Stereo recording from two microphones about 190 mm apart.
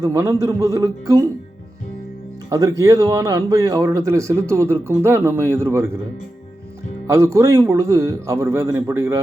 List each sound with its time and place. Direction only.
0.0 s speech: 15° right (ahead or behind)
2.5 s speech: 15° right (ahead or behind)
7.1 s speech: 15° right (ahead or behind)